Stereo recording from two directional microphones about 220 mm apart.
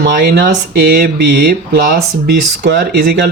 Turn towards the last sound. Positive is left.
turn(degrees=-50)  # may be behind; listen again after turning